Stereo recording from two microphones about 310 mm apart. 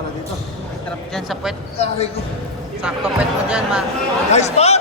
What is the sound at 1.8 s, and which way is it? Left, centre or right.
Speech, centre.